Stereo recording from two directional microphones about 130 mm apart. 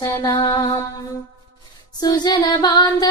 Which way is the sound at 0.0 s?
30° left (ahead or behind).